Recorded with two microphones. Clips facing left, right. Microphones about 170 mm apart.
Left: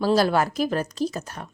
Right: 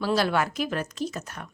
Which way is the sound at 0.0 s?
40° left (ahead or behind).